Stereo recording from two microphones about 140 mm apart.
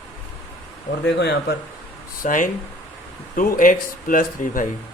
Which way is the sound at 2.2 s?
70° left (ahead or behind).